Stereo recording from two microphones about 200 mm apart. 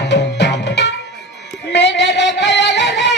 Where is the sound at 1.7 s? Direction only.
60° left (ahead or behind).